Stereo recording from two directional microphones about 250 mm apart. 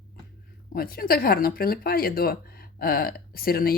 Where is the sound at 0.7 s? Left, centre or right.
Left.